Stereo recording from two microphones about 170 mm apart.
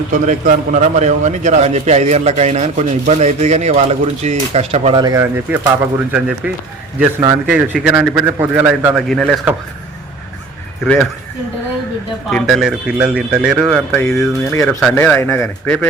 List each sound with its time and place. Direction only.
0.1 s a man's voice: 50° right (ahead or behind)
5.0 s a man's voice: 15° right (ahead or behind)
9.0 s a man's voice: centre (ahead or behind)
10.8 s a man's voice: 5° left (ahead or behind)
12.3 s a man's voice: centre (ahead or behind)